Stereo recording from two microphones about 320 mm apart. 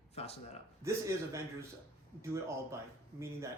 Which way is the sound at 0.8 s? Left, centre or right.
Centre.